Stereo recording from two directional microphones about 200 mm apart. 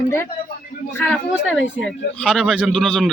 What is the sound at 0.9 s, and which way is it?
A man's voice, 5° left (ahead or behind).